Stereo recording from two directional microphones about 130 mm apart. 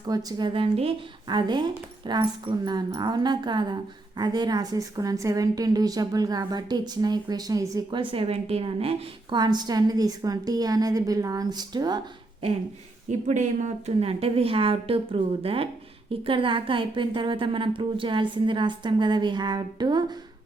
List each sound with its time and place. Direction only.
0.0 s a woman's voice: 30° right (ahead or behind)
7.9 s speech: 40° right (ahead or behind)
9.4 s a woman's voice: 35° right (ahead or behind)
13.1 s a woman's voice: 65° right (ahead or behind); by 20.1 s 35° right (ahead or behind)